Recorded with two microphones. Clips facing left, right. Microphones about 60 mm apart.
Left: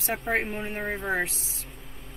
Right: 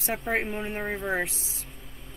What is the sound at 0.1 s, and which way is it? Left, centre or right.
Speech, centre.